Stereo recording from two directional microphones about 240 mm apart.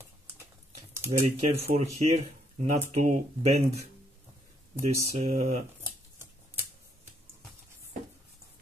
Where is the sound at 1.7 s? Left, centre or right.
Right.